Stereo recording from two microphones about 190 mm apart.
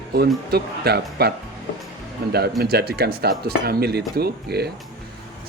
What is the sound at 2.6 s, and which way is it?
Speech, 55° right (ahead or behind).